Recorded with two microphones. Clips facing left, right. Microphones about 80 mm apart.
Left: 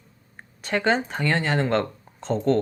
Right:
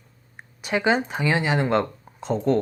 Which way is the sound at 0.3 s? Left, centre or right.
Centre.